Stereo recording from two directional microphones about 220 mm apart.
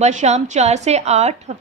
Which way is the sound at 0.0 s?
30° right (ahead or behind).